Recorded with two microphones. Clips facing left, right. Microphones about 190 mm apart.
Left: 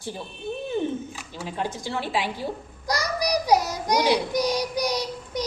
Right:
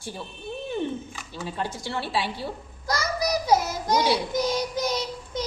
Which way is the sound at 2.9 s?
15° left (ahead or behind).